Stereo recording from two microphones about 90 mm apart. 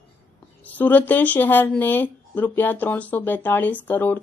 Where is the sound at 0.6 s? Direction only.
20° left (ahead or behind).